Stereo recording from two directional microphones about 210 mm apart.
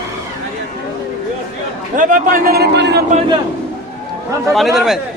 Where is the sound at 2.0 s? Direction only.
40° right (ahead or behind).